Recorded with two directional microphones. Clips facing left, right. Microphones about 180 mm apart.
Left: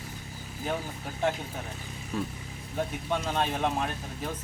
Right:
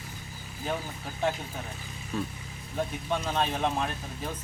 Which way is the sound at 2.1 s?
10° left (ahead or behind).